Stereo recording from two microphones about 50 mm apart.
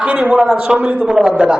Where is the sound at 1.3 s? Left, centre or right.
Right.